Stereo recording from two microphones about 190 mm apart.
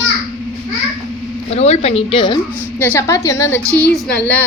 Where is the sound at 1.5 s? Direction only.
35° left (ahead or behind).